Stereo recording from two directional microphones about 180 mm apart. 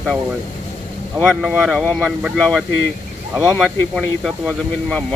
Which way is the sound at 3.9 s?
Centre (ahead or behind).